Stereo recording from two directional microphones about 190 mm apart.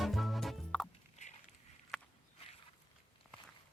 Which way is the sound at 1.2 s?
35° left (ahead or behind).